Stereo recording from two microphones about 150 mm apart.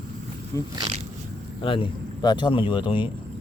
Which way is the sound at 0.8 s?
40° right (ahead or behind).